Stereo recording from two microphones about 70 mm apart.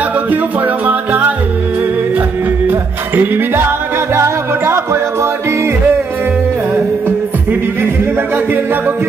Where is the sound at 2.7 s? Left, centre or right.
Right.